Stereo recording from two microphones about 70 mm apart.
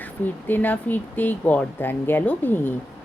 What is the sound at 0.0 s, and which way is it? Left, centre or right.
Speech, left.